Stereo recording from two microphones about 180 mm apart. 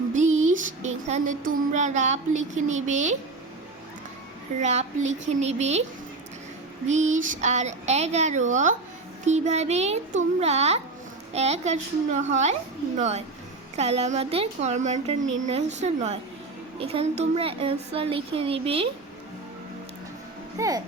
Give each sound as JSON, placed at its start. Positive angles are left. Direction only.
{"t": 0.1, "sound": "a sound", "side_deg": -40}
{"t": 4.6, "sound": "speech", "side_deg": -40}
{"t": 6.8, "sound": "speech", "side_deg": -40}
{"t": 20.6, "sound": "speech", "side_deg": -20}